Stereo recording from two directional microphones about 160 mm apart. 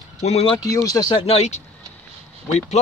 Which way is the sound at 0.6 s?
20° left (ahead or behind).